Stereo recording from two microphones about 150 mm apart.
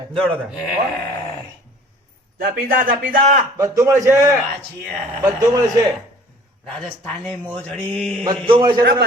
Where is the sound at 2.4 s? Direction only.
70° right (ahead or behind).